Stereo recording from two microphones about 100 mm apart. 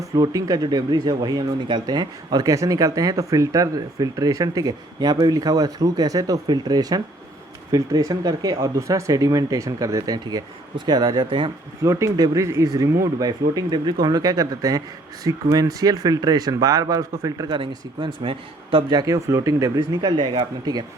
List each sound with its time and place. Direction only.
0.0 s speech: 35° right (ahead or behind); by 11.5 s 55° right (ahead or behind)
11.8 s speech: 35° right (ahead or behind)
17.5 s a man's voice: 55° right (ahead or behind)
18.9 s speech: 40° right (ahead or behind)